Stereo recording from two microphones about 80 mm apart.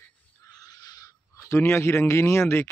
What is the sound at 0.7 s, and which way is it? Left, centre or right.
Owl, left.